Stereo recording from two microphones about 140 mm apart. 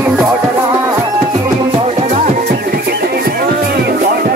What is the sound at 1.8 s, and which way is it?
Music, 50° right (ahead or behind).